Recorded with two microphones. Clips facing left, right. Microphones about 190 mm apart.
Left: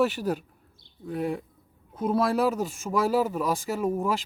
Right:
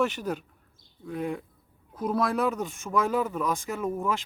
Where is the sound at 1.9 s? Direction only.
25° left (ahead or behind).